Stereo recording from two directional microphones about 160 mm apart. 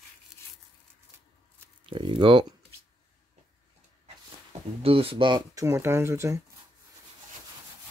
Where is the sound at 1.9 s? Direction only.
30° right (ahead or behind).